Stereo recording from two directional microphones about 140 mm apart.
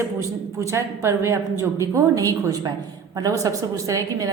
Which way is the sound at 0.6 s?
20° right (ahead or behind).